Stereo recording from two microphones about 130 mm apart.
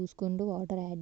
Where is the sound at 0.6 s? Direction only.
85° right.